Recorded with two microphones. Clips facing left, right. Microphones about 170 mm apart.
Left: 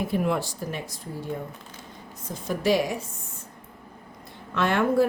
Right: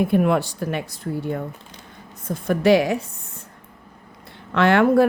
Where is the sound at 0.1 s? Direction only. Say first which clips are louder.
Right 7 dB; 60° right (ahead or behind).